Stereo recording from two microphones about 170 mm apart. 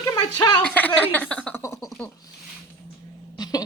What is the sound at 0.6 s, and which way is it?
A man's voice, 10° left (ahead or behind).